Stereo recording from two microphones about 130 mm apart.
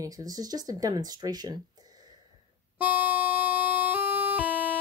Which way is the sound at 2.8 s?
15° right (ahead or behind).